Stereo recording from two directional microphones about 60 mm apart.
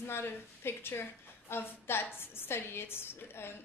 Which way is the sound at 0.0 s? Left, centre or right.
Left.